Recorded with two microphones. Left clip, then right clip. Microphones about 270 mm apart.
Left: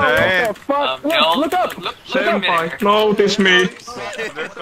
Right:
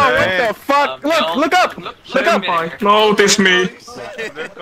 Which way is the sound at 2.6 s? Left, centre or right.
Centre.